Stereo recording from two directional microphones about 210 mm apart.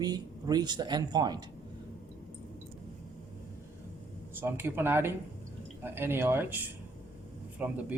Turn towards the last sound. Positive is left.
turn(degrees=-5)  # may be behind; listen again after turning